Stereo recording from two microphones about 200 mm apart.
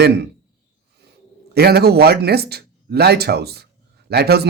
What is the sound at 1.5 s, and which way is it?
Speech, 50° right (ahead or behind).